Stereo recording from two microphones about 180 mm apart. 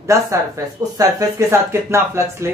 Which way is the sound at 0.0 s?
15° right (ahead or behind).